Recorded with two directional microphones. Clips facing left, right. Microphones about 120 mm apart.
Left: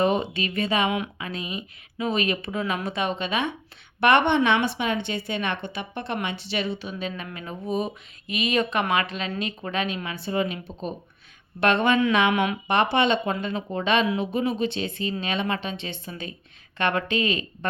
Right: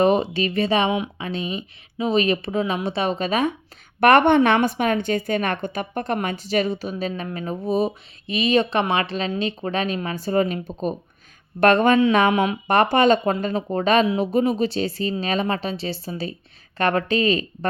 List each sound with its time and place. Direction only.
0.0 s a woman's voice: 35° right (ahead or behind)
12.6 s a woman's voice: 45° right (ahead or behind)